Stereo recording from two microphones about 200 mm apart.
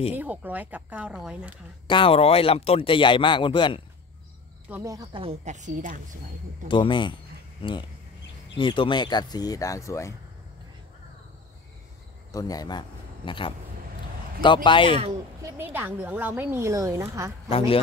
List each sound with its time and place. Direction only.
0.1 s a woman's voice: 10° right (ahead or behind)
1.9 s speech: 25° left (ahead or behind)
4.6 s a woman's voice: 15° right (ahead or behind)
5.2 s a woman's voice: 35° right (ahead or behind)
6.7 s speech: 25° left (ahead or behind)
12.3 s a man's voice: 15° left (ahead or behind)
15.4 s a woman's voice: 10° right (ahead or behind)
17.5 s speech: 30° left (ahead or behind)